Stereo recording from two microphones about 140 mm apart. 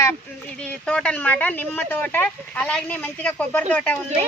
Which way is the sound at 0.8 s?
5° left (ahead or behind).